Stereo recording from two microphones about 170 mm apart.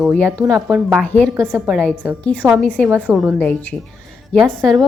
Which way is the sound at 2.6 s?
5° left (ahead or behind).